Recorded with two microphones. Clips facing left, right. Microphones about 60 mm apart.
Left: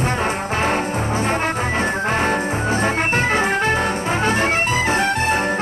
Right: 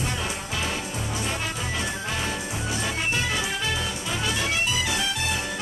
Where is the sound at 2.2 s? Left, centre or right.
Left.